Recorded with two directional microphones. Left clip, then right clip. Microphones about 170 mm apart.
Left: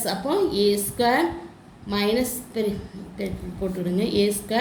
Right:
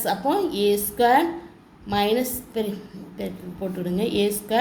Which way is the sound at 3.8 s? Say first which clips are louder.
Even; 40° right (ahead or behind).